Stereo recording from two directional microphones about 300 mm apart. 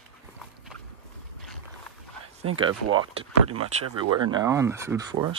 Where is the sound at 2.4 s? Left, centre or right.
Centre.